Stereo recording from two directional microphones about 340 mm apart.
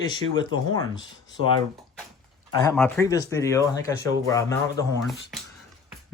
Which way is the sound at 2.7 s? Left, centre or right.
Centre.